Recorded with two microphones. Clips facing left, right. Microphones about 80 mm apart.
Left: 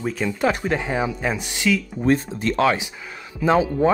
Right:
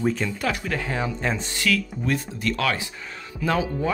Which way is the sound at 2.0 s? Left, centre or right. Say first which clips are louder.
Left 6 dB; left.